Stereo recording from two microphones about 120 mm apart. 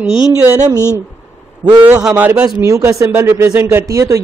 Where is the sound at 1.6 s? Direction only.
40° right (ahead or behind).